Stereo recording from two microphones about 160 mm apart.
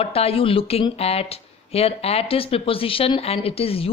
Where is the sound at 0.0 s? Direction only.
40° left (ahead or behind).